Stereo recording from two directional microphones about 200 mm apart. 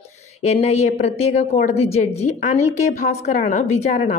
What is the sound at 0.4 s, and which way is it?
A woman's voice, 35° left (ahead or behind).